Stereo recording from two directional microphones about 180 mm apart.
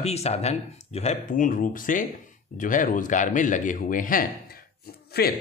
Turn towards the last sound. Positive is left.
turn(degrees=60)  # may be behind; listen again after turning